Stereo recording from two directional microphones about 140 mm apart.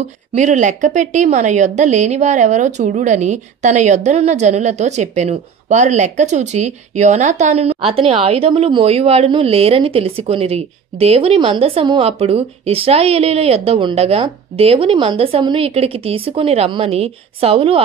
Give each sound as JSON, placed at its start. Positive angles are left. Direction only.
{"t": 0.3, "sound": "a woman's voice", "side_deg": -60}